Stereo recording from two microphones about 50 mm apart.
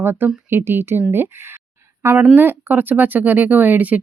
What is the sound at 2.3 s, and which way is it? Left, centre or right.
Speech, right.